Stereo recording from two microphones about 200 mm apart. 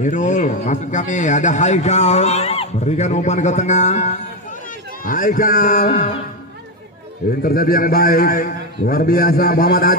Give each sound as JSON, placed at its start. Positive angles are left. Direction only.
{"t": 0.0, "sound": "a man's voice", "side_deg": 35}
{"t": 7.4, "sound": "a man's voice", "side_deg": 45}